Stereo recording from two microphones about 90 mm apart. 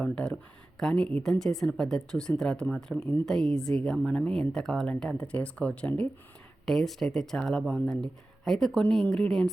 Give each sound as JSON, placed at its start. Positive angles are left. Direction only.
{"t": 0.0, "sound": "a woman's voice", "side_deg": 10}
{"t": 6.7, "sound": "speech", "side_deg": 5}